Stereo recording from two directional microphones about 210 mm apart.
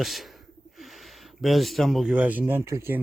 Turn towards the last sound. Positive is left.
turn(degrees=-10)  # may be behind; listen again after turning